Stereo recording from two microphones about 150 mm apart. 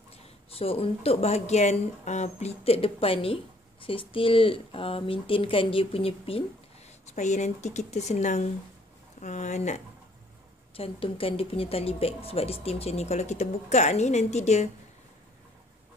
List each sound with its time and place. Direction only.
0.5 s speech: 40° left (ahead or behind)
7.2 s a woman's voice: 50° left (ahead or behind)
10.8 s a woman's voice: 40° left (ahead or behind)